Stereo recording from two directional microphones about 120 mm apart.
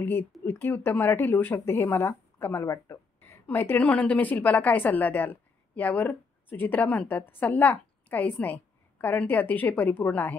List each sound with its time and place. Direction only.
0.0 s speech: 15° left (ahead or behind)